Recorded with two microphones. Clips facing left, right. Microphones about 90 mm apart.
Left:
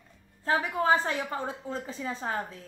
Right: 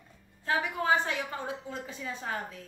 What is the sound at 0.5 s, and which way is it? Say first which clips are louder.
A woman's voice: left 3 dB; 35° left (ahead or behind).